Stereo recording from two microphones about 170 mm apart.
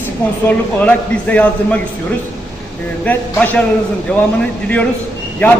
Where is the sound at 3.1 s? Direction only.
10° left (ahead or behind).